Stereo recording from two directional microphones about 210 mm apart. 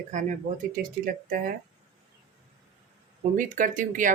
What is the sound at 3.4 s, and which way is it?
Speech, 40° right (ahead or behind).